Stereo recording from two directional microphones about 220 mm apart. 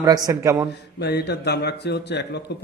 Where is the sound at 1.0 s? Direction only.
50° left (ahead or behind).